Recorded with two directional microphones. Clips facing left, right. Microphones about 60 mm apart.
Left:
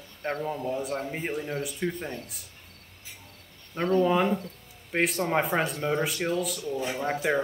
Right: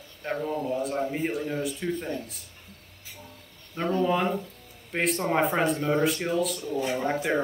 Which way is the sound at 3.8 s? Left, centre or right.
Left.